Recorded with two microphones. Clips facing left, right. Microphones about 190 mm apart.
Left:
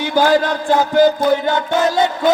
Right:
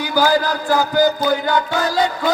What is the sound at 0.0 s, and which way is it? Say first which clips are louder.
Music: left 3 dB; 25° left (ahead or behind).